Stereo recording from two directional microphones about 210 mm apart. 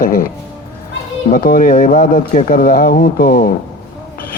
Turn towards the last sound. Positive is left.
turn(degrees=45)  # may be behind; listen again after turning